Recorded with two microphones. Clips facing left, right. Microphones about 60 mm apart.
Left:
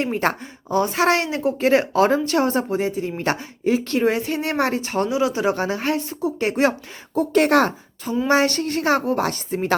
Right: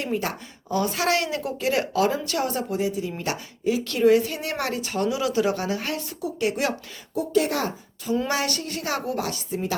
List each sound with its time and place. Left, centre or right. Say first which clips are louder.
0.0 s a woman's voice: left 6 dB; left
0.7 s a woman's voice: left 5 dB; left
7.2 s speech: left 7 dB; left
8.3 s speech: left 8 dB; left